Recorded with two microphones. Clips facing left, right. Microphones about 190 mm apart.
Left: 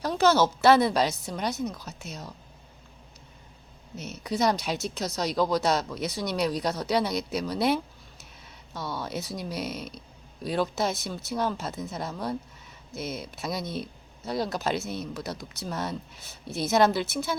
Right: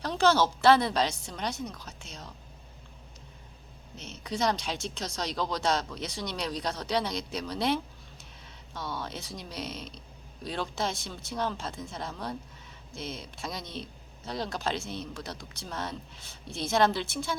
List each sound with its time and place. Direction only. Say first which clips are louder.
0.6 s speech: left 2 dB; 10° left (ahead or behind)
3.9 s speech: left 6 dB; 40° left (ahead or behind)
4.2 s speech: left 4 dB; 10° left (ahead or behind)